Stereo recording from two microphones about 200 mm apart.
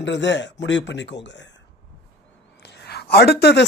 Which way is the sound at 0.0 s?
60° left (ahead or behind).